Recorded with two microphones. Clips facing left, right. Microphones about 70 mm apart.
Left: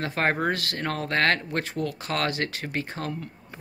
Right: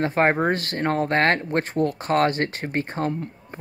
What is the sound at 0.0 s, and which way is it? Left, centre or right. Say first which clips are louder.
Speech: right 5 dB; right.